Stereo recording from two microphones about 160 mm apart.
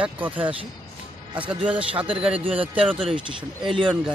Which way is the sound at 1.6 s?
35° right (ahead or behind).